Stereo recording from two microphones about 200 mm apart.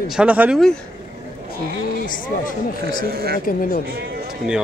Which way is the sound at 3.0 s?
50° right (ahead or behind).